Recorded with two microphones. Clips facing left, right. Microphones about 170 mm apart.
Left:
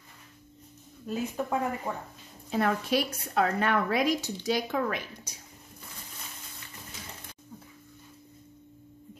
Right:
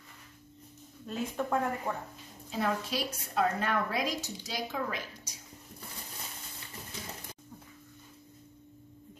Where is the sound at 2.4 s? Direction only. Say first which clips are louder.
Left 5 dB; 65° left (ahead or behind).